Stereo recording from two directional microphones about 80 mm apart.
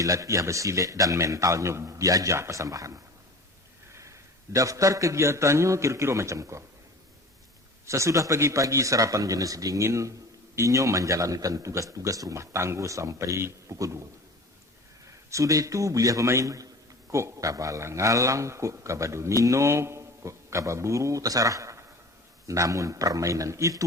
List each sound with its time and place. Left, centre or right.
0.0 s speech: right
4.5 s speech: right
7.9 s speech: right
15.0 s a man's voice: right